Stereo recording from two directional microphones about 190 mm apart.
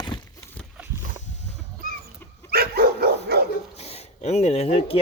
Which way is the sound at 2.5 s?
55° right (ahead or behind).